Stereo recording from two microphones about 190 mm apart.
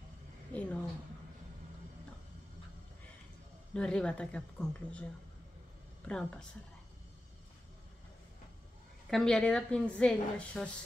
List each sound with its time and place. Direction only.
0.5 s a sound: 5° left (ahead or behind)
3.7 s a woman's voice: 5° left (ahead or behind)
6.0 s a woman's voice: 5° left (ahead or behind)
9.1 s a woman's voice: 5° left (ahead or behind)